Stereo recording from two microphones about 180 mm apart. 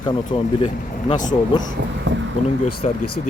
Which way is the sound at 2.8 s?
40° left (ahead or behind).